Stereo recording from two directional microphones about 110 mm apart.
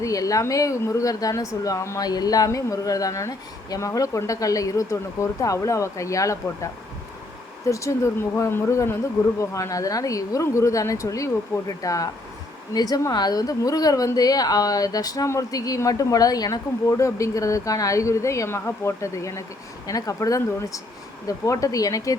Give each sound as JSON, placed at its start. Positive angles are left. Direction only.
{"t": 0.0, "sound": "a woman's voice", "side_deg": 30}